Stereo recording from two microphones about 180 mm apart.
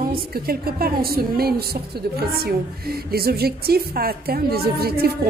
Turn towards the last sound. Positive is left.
turn(degrees=-60)  # may be behind; listen again after turning